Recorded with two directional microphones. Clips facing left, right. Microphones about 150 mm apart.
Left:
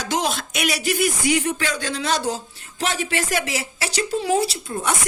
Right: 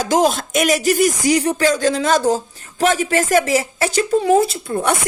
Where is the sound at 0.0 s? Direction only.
45° right (ahead or behind).